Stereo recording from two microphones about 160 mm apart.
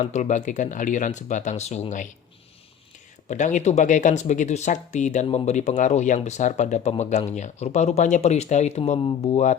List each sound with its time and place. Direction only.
0.0 s speech: 45° left (ahead or behind)
3.2 s speech: 50° left (ahead or behind); by 9.4 s 35° left (ahead or behind)